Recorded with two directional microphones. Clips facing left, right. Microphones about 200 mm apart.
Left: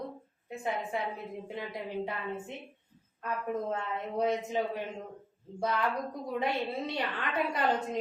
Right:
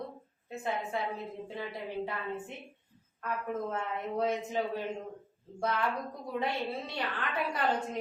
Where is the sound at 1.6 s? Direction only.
15° left (ahead or behind).